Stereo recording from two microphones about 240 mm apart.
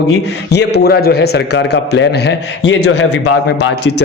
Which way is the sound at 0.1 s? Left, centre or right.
Left.